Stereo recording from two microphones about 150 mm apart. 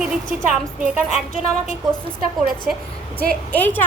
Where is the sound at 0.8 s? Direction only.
10° right (ahead or behind).